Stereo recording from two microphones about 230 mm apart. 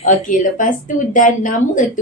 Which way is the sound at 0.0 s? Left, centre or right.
Left.